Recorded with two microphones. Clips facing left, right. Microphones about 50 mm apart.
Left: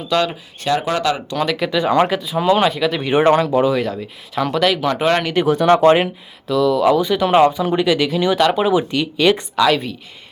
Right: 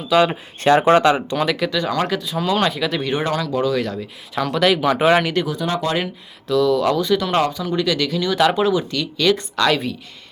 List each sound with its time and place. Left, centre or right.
0.1 s speech: centre
0.6 s speech: right
1.5 s speech: centre
1.8 s speech: left
2.1 s speech: centre
3.0 s speech: centre
3.2 s speech: left
3.6 s speech: centre
5.5 s speech: left
6.5 s speech: centre
7.6 s speech: left
7.9 s speech: centre
9.6 s speech: centre